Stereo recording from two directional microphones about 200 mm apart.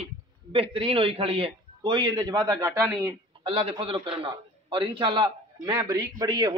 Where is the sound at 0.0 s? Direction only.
30° right (ahead or behind); by 3.2 s 10° right (ahead or behind).